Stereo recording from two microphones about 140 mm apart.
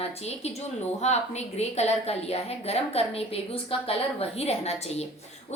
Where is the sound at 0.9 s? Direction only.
50° left (ahead or behind).